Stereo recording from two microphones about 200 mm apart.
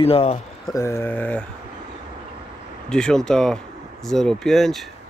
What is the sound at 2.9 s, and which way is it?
Speech, 5° left (ahead or behind).